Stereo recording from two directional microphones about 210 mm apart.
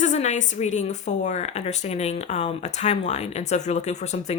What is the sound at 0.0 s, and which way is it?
Speech, 35° left (ahead or behind).